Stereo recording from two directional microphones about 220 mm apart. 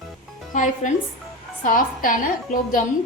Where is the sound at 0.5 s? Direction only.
35° left (ahead or behind).